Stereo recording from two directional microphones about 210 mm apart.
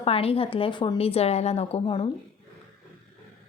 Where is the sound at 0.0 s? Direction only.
25° left (ahead or behind).